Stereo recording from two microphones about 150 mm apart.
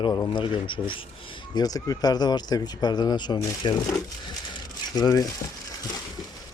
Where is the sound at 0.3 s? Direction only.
35° left (ahead or behind).